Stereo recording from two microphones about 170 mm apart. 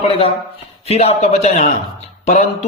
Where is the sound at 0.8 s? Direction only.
40° left (ahead or behind).